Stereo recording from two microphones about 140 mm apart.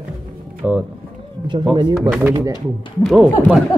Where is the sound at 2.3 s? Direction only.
25° right (ahead or behind).